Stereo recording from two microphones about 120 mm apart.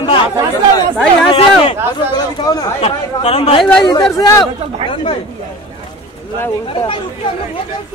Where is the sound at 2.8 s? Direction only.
55° left (ahead or behind).